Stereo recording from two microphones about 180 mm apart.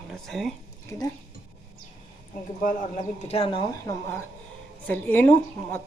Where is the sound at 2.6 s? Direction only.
45° left (ahead or behind).